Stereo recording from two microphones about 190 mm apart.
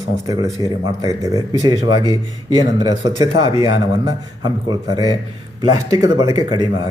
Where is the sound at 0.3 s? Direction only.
20° right (ahead or behind).